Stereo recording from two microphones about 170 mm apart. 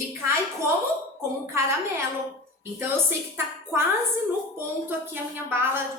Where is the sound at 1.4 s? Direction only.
15° right (ahead or behind).